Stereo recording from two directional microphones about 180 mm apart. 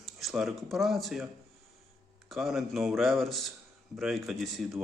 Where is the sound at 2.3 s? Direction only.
Centre (ahead or behind).